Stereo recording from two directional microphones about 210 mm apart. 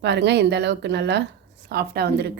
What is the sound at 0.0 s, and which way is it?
Speech, 55° right (ahead or behind).